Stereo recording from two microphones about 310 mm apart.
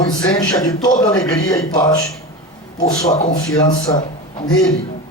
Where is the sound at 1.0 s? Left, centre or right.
Centre.